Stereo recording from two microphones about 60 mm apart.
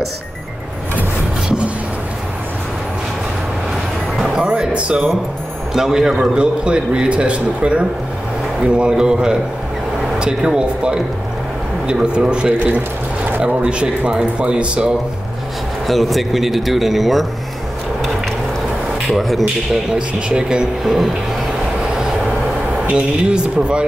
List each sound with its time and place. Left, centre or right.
4.2 s music: centre
5.7 s a man's voice: centre
12.5 s speech: right
15.9 s speech: centre
19.0 s speech: centre
20.2 s a man's voice: centre
21.8 s vehicle: centre
22.8 s a man's voice: centre